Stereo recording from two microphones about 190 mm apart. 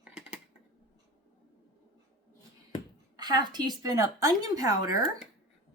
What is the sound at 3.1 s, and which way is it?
A woman's voice, 20° right (ahead or behind).